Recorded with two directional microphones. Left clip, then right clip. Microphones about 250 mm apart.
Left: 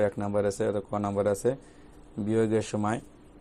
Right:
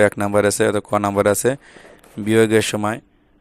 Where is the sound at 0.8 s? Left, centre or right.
Right.